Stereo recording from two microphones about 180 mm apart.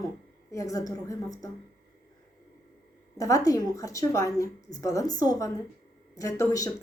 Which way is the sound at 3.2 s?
20° left (ahead or behind).